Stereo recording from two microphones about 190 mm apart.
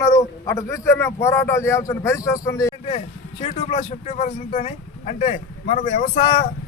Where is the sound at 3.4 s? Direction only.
30° left (ahead or behind).